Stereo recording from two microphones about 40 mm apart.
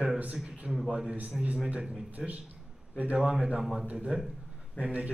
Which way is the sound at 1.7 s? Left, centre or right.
Right.